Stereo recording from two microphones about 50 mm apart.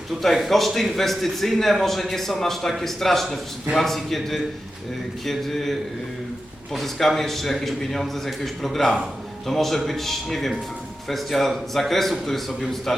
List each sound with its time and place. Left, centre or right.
0.2 s a man's voice: centre
6.7 s a man's voice: centre